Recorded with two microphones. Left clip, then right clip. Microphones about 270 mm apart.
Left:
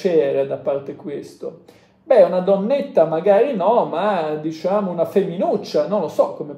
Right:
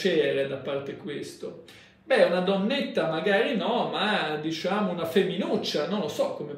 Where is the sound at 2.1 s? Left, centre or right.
Centre.